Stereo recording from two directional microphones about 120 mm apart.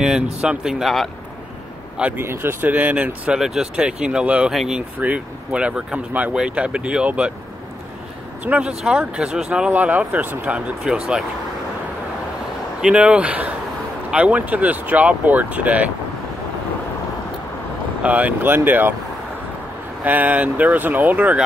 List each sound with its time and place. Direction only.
0.0 s speech: 5° right (ahead or behind)
2.0 s speech: 15° right (ahead or behind)
8.5 s speech: 10° right (ahead or behind)
12.8 s speech: 10° right (ahead or behind)
18.0 s speech: 10° right (ahead or behind)
20.0 s speech: 15° right (ahead or behind)